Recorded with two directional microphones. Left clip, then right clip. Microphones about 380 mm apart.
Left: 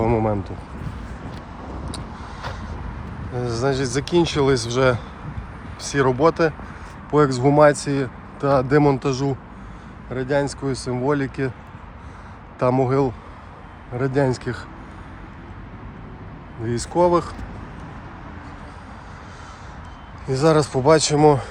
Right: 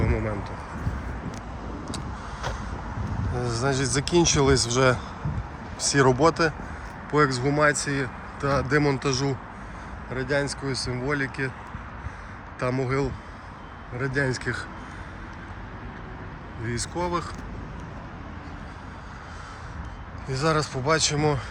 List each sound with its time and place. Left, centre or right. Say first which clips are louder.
0.0 s a sound: left 8 dB; centre
3.3 s speech: left 4 dB; centre
7.1 s speech: left 5 dB; centre
12.5 s speech: left 8 dB; centre
16.6 s speech: left 11 dB; centre
20.2 s speech: left 7 dB; centre